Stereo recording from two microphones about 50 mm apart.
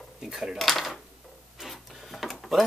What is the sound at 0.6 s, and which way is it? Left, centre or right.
Dishes, centre.